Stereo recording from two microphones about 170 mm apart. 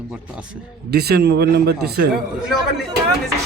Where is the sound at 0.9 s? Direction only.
70° right (ahead or behind).